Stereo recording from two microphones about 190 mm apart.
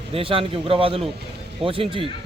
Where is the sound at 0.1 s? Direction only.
30° right (ahead or behind).